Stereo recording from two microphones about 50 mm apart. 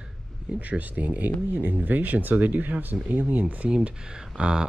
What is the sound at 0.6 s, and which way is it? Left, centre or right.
Speech, right.